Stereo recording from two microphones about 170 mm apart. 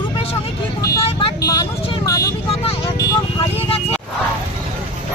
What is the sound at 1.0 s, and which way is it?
Speech, 30° left (ahead or behind).